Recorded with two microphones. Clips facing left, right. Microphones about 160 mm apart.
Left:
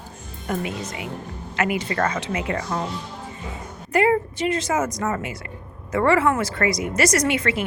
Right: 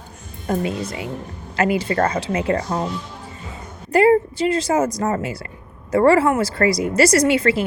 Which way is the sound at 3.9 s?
35° right (ahead or behind).